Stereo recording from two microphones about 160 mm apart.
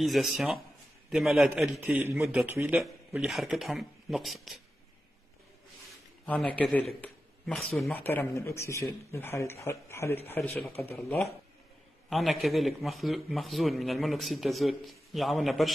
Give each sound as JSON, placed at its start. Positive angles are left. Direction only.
{"t": 0.0, "sound": "speech", "side_deg": 0}
{"t": 6.2, "sound": "a man's voice", "side_deg": 10}
{"t": 7.9, "sound": "speech", "side_deg": 15}
{"t": 12.1, "sound": "speech", "side_deg": 0}